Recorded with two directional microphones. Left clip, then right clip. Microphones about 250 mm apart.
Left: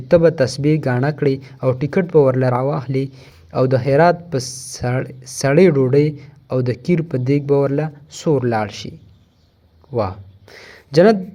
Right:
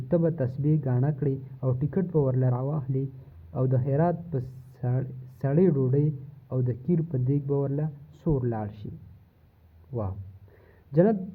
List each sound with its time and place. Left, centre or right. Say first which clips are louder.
0.1 s speech: left 14 dB; centre
9.9 s speech: left 14 dB; left
10.6 s a sound: left 11 dB; centre